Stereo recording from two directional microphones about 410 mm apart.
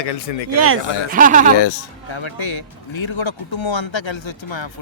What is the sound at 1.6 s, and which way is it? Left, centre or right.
Speech, left.